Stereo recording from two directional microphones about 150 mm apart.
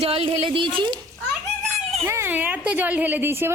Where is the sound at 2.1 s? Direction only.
15° right (ahead or behind).